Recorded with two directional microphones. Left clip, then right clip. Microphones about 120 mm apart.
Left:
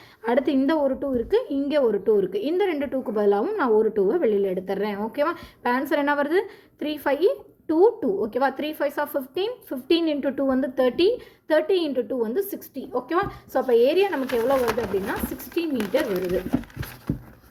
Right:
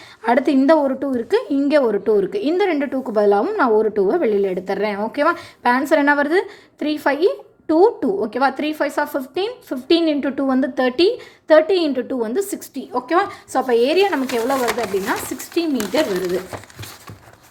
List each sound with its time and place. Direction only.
0.2 s a woman's voice: 35° right (ahead or behind)